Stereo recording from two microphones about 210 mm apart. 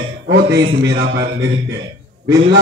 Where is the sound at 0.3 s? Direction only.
55° right (ahead or behind).